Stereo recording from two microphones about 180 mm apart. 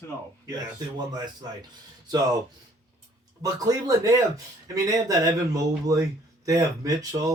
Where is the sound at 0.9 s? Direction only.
25° right (ahead or behind).